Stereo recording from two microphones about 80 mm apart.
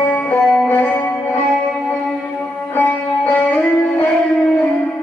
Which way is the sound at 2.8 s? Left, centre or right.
Centre.